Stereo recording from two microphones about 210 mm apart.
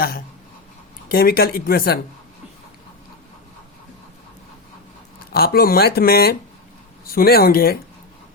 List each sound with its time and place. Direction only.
1.1 s speech: 45° left (ahead or behind)
5.3 s speech: 45° left (ahead or behind)